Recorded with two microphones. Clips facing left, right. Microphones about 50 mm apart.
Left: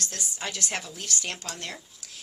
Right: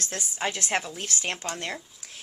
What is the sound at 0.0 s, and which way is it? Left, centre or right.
Speech, right.